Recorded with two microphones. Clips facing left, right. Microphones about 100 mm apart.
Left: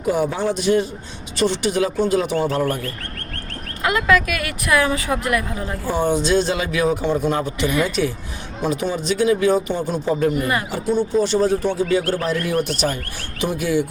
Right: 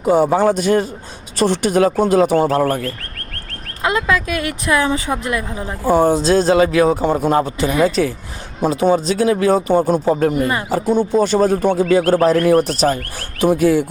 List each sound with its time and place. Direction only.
0.0 s a man's voice: 30° right (ahead or behind)
0.3 s speech: 45° right (ahead or behind)
3.8 s a woman's voice: 25° right (ahead or behind)
5.8 s speech: 40° right (ahead or behind)
10.4 s a woman's voice: 25° right (ahead or behind)
10.8 s speech: 50° right (ahead or behind)